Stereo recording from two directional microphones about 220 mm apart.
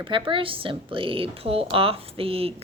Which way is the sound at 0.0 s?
25° right (ahead or behind).